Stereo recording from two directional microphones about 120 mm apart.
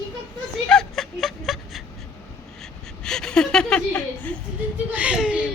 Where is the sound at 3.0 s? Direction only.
5° left (ahead or behind).